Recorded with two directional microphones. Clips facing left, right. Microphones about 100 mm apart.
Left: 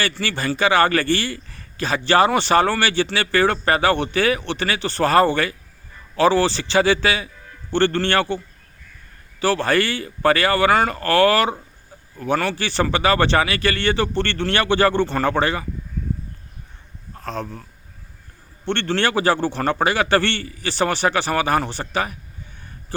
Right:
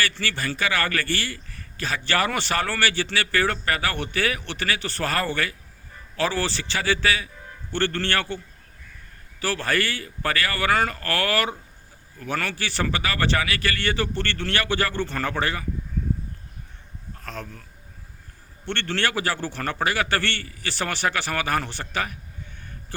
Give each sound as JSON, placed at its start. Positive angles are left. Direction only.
{"t": 0.0, "sound": "a man's voice", "side_deg": 25}
{"t": 9.4, "sound": "a man's voice", "side_deg": 25}
{"t": 17.2, "sound": "a man's voice", "side_deg": 30}